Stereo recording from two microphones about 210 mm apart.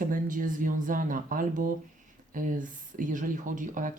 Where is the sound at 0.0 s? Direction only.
40° right (ahead or behind).